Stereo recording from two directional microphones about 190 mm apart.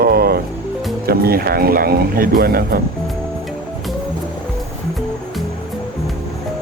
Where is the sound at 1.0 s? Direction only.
55° right (ahead or behind).